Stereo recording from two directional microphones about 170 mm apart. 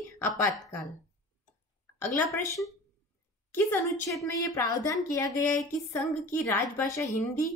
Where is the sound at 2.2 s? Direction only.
15° left (ahead or behind).